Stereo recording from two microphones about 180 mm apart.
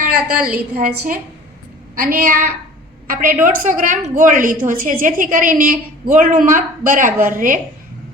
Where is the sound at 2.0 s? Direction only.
55° right (ahead or behind).